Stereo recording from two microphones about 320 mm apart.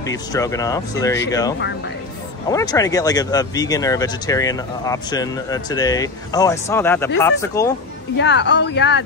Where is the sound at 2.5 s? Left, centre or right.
Centre.